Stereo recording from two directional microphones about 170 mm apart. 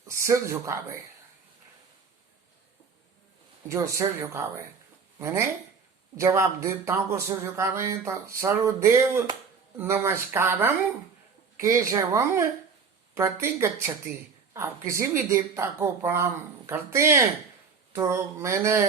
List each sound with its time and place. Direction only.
0.0 s speech: 15° right (ahead or behind)
3.7 s speech: 15° right (ahead or behind)